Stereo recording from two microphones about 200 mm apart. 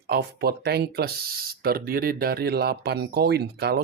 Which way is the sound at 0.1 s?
55° right (ahead or behind).